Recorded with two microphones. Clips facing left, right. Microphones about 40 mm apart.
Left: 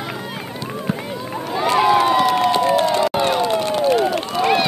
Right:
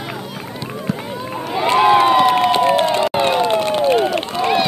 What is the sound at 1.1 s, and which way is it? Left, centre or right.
Run, centre.